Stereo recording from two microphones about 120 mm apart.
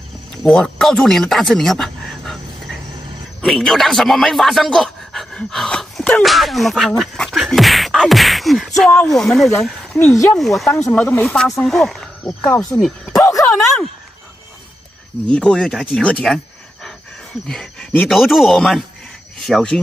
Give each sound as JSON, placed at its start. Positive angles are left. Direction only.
{"t": 0.4, "sound": "speech", "side_deg": 0}
{"t": 7.0, "sound": "a sound", "side_deg": 0}
{"t": 10.3, "sound": "speech", "side_deg": 0}
{"t": 10.8, "sound": "speech", "side_deg": 15}
{"t": 11.2, "sound": "speech", "side_deg": 0}
{"t": 15.2, "sound": "speech", "side_deg": 10}
{"t": 17.5, "sound": "speech", "side_deg": 5}